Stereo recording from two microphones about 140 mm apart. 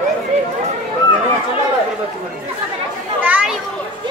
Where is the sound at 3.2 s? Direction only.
10° right (ahead or behind).